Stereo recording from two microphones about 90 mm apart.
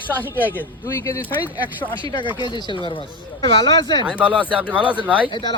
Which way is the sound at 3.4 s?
60° left (ahead or behind).